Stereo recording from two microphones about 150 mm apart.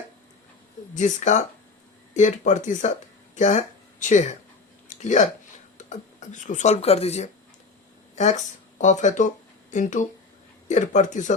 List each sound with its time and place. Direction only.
0.9 s speech: 55° left (ahead or behind)